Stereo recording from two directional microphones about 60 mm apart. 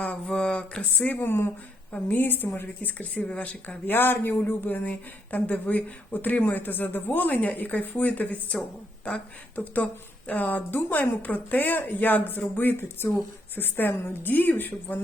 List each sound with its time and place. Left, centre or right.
0.0 s a woman's voice: left
1.9 s a woman's voice: left
3.2 s a woman's voice: centre
3.8 s a woman's voice: left